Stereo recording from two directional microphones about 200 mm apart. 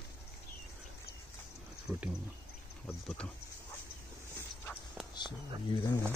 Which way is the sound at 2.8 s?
5° left (ahead or behind).